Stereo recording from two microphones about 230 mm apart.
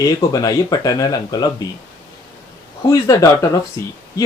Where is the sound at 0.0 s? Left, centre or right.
Centre.